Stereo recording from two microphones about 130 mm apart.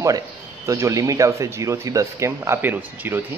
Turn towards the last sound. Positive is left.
turn(degrees=-15)  # may be behind; listen again after turning